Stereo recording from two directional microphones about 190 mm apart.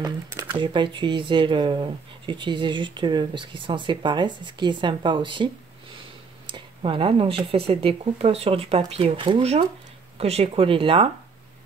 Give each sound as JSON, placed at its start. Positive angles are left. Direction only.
{"t": 0.0, "sound": "speech", "side_deg": -15}
{"t": 0.6, "sound": "speech", "side_deg": -25}